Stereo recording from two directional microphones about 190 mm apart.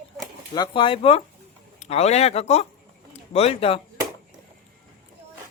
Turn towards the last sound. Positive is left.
turn(degrees=30)  # may be behind; listen again after turning